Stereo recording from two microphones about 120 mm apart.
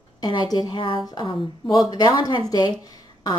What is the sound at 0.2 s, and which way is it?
A woman's voice, 35° left (ahead or behind).